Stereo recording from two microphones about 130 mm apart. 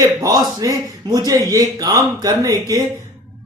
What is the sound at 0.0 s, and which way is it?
Speech, 30° right (ahead or behind).